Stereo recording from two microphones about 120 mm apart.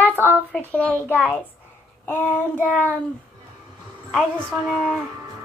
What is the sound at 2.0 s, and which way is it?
Child singing, 15° left (ahead or behind).